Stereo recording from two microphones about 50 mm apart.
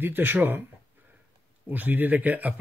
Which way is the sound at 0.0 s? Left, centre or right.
Right.